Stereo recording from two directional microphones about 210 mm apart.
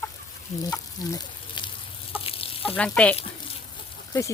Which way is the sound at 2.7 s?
5° left (ahead or behind).